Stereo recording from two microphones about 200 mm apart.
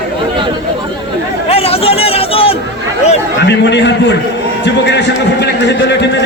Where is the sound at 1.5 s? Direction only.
30° left (ahead or behind).